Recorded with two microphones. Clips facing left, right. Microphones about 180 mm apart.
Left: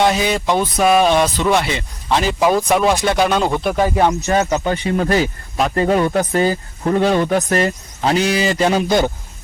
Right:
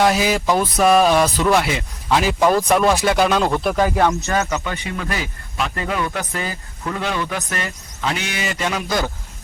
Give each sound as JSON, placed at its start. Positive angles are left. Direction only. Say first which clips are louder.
{"t": 0.0, "sound": "speech", "louder": "left 1 dB", "side_deg": -5}
{"t": 4.4, "sound": "speech", "louder": "left 5 dB", "side_deg": 35}